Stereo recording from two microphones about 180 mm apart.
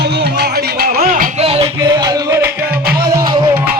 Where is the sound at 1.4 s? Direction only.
35° right (ahead or behind).